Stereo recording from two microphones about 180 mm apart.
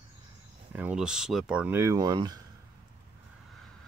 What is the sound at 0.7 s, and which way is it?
Speech, 5° right (ahead or behind).